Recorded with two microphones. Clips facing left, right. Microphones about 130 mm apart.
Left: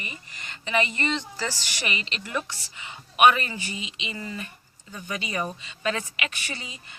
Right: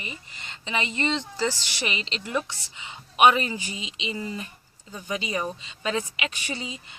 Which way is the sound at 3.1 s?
25° right (ahead or behind).